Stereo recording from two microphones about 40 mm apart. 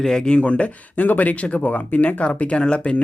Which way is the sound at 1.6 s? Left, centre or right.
Left.